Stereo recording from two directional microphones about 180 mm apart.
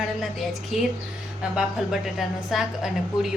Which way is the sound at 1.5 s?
Centre (ahead or behind).